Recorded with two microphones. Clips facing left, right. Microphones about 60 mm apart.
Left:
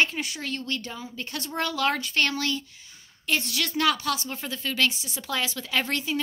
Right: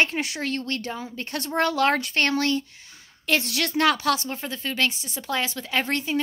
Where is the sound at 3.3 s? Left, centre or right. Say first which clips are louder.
Right 3 dB; right.